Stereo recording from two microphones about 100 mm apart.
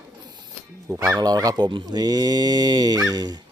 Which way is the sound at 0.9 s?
30° right (ahead or behind).